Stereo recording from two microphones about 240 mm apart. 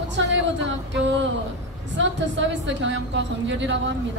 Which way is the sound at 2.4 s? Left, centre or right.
Right.